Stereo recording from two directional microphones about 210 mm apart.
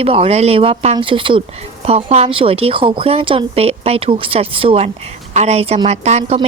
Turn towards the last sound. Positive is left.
turn(degrees=-30)  # may be behind; listen again after turning